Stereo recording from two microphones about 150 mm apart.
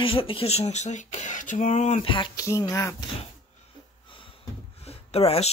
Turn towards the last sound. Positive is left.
turn(degrees=40)  # may be behind; listen again after turning